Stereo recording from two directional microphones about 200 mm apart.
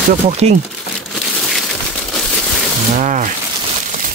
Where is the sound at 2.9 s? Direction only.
40° right (ahead or behind).